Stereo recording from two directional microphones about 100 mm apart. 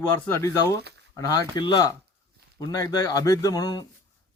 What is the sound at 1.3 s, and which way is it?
Speech, 45° left (ahead or behind).